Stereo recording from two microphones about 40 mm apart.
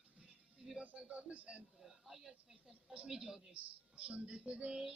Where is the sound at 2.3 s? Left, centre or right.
Centre.